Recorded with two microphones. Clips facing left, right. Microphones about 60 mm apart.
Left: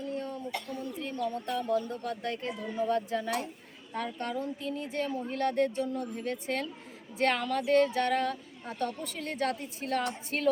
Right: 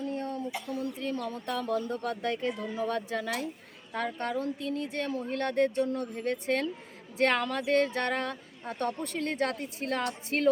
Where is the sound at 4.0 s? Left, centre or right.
Right.